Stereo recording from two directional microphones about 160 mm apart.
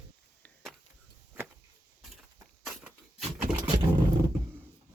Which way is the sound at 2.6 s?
Centre (ahead or behind).